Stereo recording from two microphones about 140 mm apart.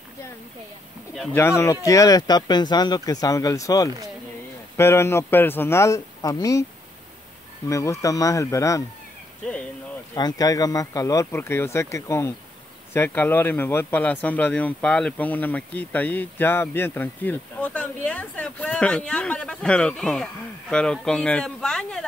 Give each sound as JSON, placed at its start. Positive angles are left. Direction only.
{"t": 1.3, "sound": "speech", "side_deg": 20}
{"t": 7.6, "sound": "speech", "side_deg": 20}
{"t": 10.1, "sound": "a man's voice", "side_deg": 25}